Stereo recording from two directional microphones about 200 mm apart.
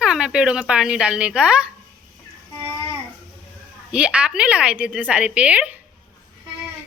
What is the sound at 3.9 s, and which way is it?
A woman's voice, 5° right (ahead or behind).